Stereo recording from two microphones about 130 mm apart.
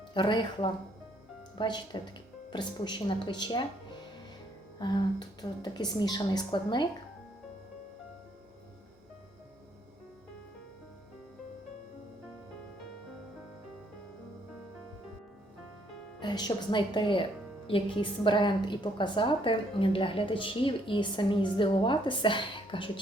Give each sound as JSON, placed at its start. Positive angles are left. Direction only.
{"t": 0.1, "sound": "a woman's voice", "side_deg": 35}
{"t": 16.2, "sound": "a woman's voice", "side_deg": 35}